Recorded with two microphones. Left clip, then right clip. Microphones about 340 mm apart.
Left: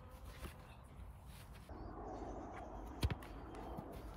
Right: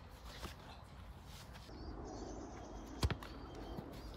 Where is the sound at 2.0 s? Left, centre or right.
Left.